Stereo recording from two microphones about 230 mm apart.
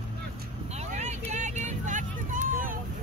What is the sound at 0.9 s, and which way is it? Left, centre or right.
Vehicle, right.